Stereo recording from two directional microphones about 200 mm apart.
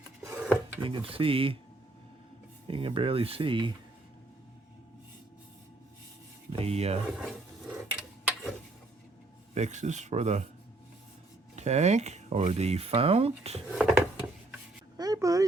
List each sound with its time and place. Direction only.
0.2 s filing: 10° right (ahead or behind)
0.8 s speech: 25° right (ahead or behind)
2.6 s speech: 25° right (ahead or behind)
6.5 s speech: 30° right (ahead or behind)
7.2 s roar: centre (ahead or behind)
9.6 s speech: 35° right (ahead or behind)
11.5 s speech: 35° right (ahead or behind)
13.7 s a sound: 5° right (ahead or behind)
14.9 s a sound: 20° right (ahead or behind)